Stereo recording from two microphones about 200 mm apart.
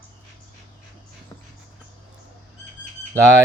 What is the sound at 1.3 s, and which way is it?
Music, 15° left (ahead or behind).